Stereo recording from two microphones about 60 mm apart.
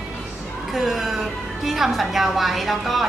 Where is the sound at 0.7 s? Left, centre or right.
Centre.